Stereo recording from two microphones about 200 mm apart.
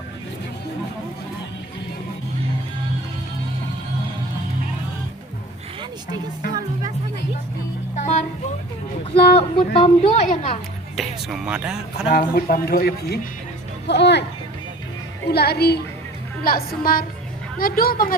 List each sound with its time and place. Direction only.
7.9 s music: 35° left (ahead or behind)
9.3 s speech: 30° left (ahead or behind)
10.9 s speech: centre (ahead or behind)
12.1 s speech: 45° left (ahead or behind)
15.3 s speech: 55° left (ahead or behind)